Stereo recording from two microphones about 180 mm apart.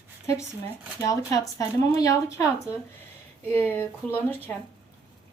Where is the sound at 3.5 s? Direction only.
10° left (ahead or behind).